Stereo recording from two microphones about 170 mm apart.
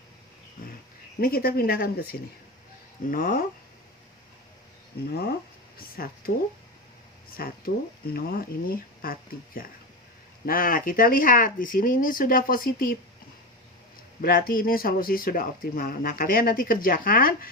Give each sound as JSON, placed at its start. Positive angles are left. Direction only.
{"t": 1.2, "sound": "speech", "side_deg": 65}
{"t": 3.1, "sound": "speech", "side_deg": 55}
{"t": 5.7, "sound": "speech", "side_deg": 60}
{"t": 7.3, "sound": "speech", "side_deg": 60}
{"t": 14.2, "sound": "speech", "side_deg": 60}